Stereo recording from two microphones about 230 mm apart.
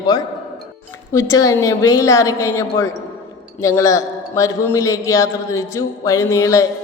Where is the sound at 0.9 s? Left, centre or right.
Centre.